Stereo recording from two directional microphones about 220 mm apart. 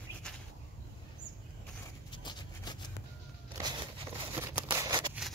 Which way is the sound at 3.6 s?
20° right (ahead or behind).